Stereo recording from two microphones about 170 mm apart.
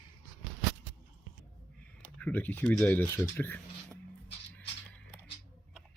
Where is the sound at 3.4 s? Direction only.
10° left (ahead or behind).